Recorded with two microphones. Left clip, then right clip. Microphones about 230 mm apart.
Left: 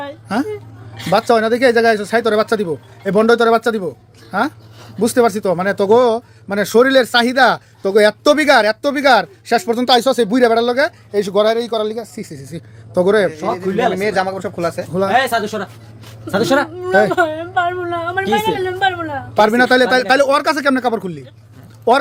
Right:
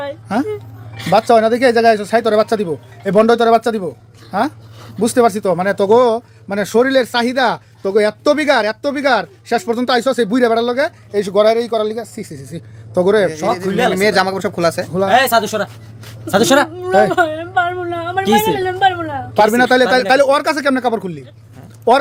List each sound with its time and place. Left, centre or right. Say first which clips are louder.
0.0 s a woman's voice: right 2 dB; centre
13.3 s speech: right 2 dB; right
15.1 s speech: right 4 dB; right
16.8 s a woman's voice: right 1 dB; centre